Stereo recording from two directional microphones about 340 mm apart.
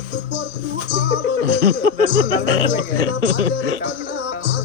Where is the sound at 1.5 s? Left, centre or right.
Right.